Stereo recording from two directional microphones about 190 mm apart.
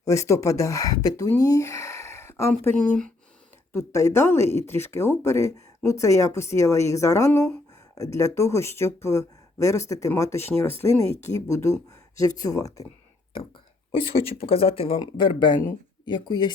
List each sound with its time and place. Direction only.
0.0 s speech: 15° left (ahead or behind)
14.4 s speech: 30° left (ahead or behind)